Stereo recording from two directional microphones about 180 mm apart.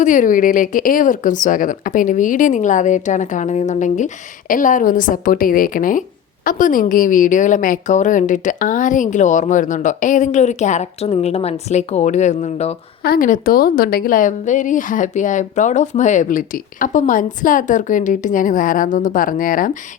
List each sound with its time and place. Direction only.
0.0 s a woman's voice: 45° left (ahead or behind)
13.1 s a woman's voice: 50° left (ahead or behind)